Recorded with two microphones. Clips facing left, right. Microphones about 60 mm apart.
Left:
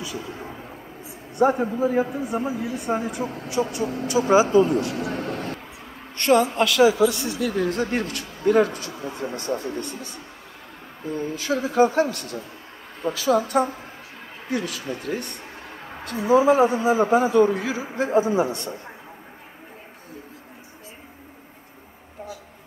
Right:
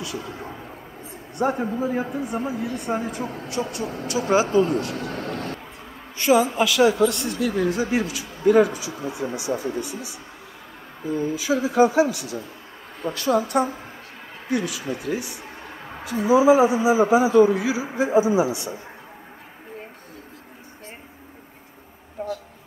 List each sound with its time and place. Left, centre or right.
0.0 s speech: centre
4.1 s speech: left
4.9 s vehicle: centre
6.1 s a man's voice: centre
22.2 s a sound: right